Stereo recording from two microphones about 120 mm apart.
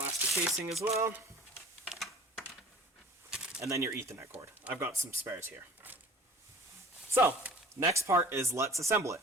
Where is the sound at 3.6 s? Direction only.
25° right (ahead or behind).